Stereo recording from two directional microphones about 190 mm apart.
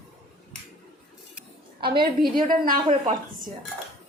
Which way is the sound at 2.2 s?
45° right (ahead or behind).